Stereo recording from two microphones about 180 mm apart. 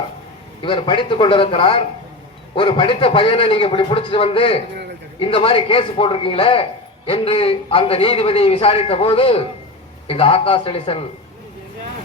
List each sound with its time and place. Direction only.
0.6 s a man's voice: 25° left (ahead or behind)